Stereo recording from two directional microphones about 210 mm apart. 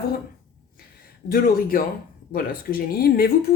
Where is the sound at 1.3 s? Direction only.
45° left (ahead or behind).